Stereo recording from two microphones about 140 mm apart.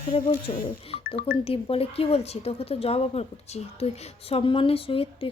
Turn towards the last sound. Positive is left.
turn(degrees=40)  # may be behind; listen again after turning